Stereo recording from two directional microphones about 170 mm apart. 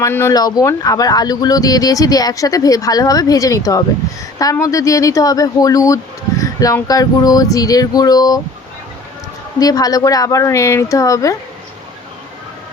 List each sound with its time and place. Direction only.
0.0 s speech: 15° left (ahead or behind)
9.6 s speech: 20° left (ahead or behind)